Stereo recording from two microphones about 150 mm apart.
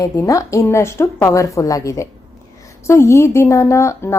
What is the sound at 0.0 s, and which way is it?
Speech, 20° left (ahead or behind).